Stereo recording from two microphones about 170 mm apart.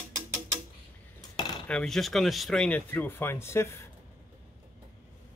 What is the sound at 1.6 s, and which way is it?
Speech, 5° left (ahead or behind).